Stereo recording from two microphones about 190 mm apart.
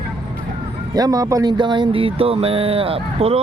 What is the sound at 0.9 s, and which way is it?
Speech, 20° right (ahead or behind).